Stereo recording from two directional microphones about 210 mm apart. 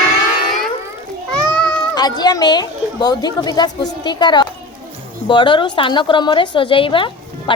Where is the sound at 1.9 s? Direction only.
20° left (ahead or behind).